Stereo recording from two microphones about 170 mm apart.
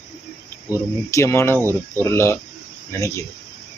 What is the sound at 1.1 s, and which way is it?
Speech, 15° left (ahead or behind).